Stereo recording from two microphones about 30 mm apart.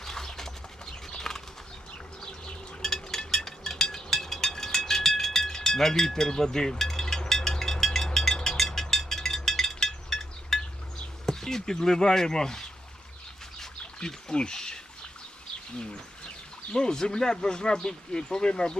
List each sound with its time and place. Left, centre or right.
0.0 s bird: centre
1.3 s bird flight: centre
2.8 s a sound: centre
9.4 s chink: centre
11.3 s speech: centre
13.6 s pour: left
16.7 s speech: left